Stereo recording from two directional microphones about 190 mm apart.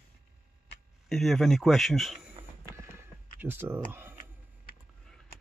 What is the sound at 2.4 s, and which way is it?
Music, 30° right (ahead or behind).